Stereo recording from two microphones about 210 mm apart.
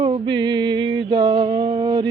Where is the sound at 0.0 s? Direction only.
20° right (ahead or behind).